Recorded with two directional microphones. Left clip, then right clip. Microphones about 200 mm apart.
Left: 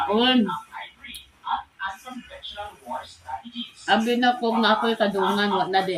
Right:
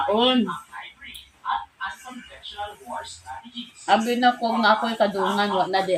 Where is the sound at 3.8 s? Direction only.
Centre (ahead or behind).